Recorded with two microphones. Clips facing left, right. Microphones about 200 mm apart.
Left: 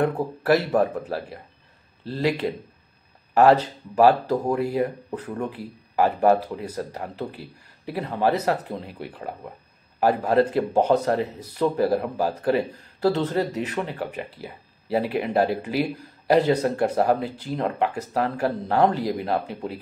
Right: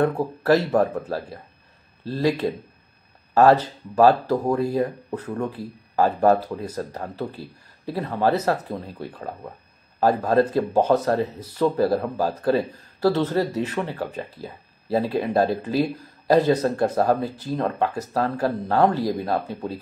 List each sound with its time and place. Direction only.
0.0 s speech: 20° left (ahead or behind)
2.0 s speech: 15° left (ahead or behind)
3.3 s speech: 15° left (ahead or behind)